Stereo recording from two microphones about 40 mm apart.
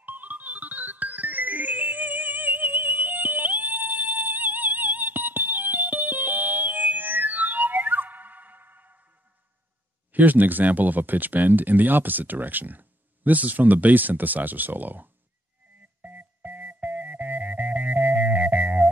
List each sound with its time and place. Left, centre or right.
0.0 s music: right
10.1 s speech: right
16.0 s music: right